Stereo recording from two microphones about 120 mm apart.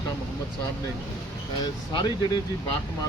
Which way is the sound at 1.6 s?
35° left (ahead or behind).